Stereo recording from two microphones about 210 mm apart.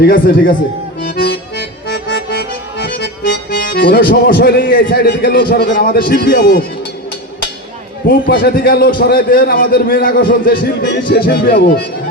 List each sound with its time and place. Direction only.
0.0 s a man's voice: 45° left (ahead or behind)
1.0 s accordion: 45° left (ahead or behind)
3.6 s a man's voice: 45° left (ahead or behind)
8.3 s a man's voice: 45° left (ahead or behind)